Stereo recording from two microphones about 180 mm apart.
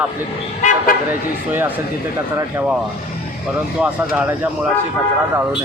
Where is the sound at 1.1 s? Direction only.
10° right (ahead or behind).